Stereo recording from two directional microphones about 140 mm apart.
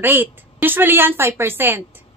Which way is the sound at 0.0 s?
15° right (ahead or behind).